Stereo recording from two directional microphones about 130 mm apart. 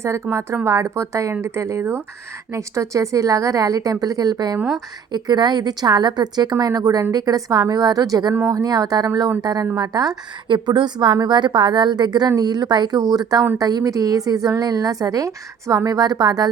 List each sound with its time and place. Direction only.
0.0 s a woman's voice: 20° right (ahead or behind)